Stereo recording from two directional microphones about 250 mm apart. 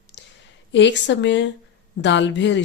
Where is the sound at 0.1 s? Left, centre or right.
Left.